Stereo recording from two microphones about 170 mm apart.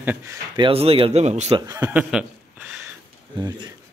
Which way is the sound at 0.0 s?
15° right (ahead or behind).